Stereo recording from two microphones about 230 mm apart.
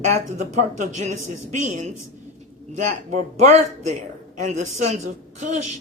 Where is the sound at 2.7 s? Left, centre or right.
Right.